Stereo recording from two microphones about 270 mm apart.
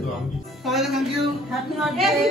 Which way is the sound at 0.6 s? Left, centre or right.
Centre.